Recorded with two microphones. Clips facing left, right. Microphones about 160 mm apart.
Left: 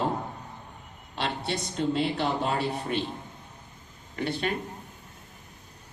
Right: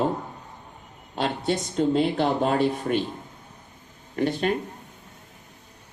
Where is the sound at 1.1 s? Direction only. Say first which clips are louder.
Right 5 dB; 45° right (ahead or behind).